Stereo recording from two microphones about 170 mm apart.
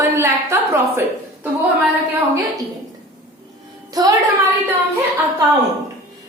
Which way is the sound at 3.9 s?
20° right (ahead or behind).